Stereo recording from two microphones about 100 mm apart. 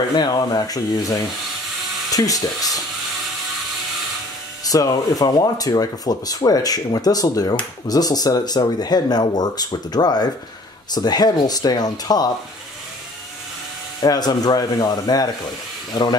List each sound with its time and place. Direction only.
0.1 s speech: 45° left (ahead or behind)
4.6 s speech: 40° left (ahead or behind)
14.0 s speech: 40° left (ahead or behind)